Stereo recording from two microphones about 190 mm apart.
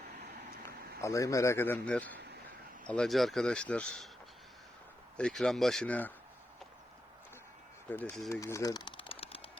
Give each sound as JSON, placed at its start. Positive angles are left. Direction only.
{"t": 0.2, "sound": "vehicle", "side_deg": -55}
{"t": 1.0, "sound": "speech", "side_deg": 15}
{"t": 5.1, "sound": "speech", "side_deg": 5}
{"t": 7.9, "sound": "speech", "side_deg": 10}
{"t": 8.3, "sound": "a sound", "side_deg": 15}